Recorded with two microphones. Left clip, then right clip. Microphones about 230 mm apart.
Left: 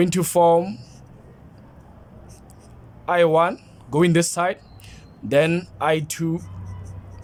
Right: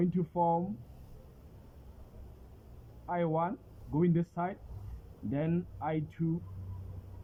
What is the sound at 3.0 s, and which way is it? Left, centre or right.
Speech, left.